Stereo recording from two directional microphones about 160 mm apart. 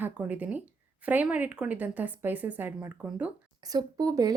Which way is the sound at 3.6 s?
25° right (ahead or behind).